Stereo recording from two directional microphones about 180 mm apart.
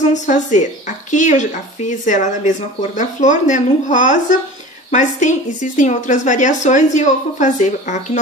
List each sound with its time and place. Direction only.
0.1 s speech: 40° left (ahead or behind)